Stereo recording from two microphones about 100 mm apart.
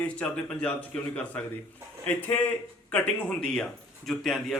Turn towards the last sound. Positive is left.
turn(degrees=0)  # may be behind; listen again after turning